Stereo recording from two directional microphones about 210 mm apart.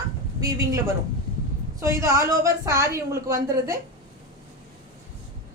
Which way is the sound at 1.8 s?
15° right (ahead or behind).